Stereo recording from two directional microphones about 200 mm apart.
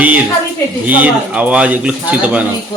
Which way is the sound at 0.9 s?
5° right (ahead or behind).